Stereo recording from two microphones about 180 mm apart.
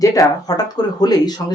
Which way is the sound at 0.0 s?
20° left (ahead or behind).